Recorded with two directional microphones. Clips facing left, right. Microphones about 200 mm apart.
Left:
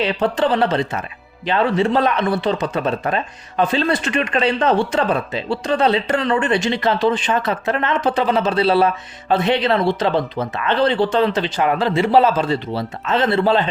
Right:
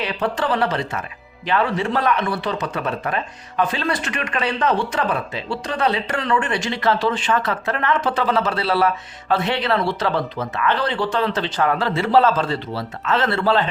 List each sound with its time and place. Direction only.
0.0 s speech: 25° left (ahead or behind)